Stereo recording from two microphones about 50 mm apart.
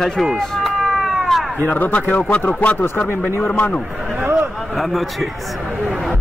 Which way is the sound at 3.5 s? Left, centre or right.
Left.